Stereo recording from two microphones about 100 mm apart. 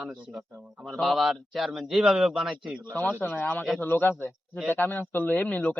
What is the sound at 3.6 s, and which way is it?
Speech, centre (ahead or behind).